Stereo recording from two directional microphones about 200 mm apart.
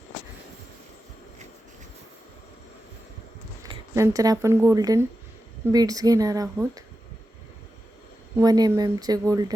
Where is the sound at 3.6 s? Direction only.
15° right (ahead or behind).